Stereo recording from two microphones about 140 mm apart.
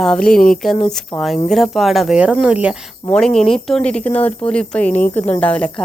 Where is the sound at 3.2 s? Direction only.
5° left (ahead or behind).